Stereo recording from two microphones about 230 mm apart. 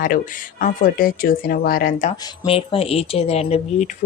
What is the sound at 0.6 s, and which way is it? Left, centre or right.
Speech, left.